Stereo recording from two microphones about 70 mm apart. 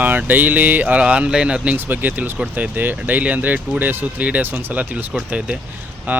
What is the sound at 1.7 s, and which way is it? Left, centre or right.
Speech, right.